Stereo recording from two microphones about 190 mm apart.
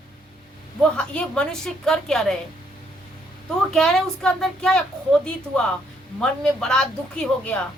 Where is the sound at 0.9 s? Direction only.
5° left (ahead or behind).